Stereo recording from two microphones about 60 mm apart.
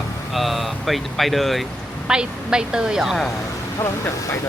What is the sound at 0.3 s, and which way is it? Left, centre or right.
Speech, centre.